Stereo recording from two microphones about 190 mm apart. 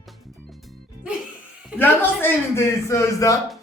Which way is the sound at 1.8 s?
10° left (ahead or behind).